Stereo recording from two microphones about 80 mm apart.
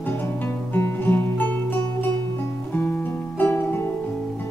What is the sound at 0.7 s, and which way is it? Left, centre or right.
Music, left.